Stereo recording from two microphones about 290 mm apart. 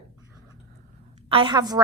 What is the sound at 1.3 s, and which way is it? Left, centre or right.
Speech, centre.